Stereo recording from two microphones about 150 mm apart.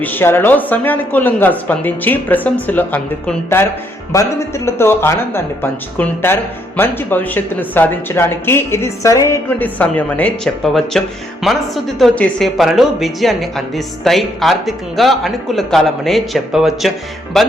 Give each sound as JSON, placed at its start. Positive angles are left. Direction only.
{"t": 0.0, "sound": "speech", "side_deg": 15}